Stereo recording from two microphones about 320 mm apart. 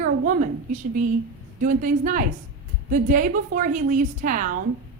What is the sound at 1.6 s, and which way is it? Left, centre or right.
A woman's voice, right.